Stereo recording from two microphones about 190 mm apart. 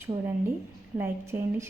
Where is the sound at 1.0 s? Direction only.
10° right (ahead or behind).